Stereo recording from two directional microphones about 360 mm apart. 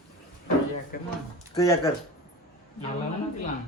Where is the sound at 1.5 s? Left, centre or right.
Centre.